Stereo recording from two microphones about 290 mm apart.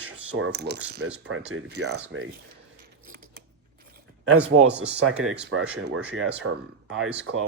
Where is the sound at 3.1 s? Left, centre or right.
Right.